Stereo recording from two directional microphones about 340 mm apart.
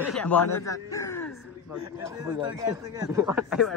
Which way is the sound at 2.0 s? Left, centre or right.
Centre.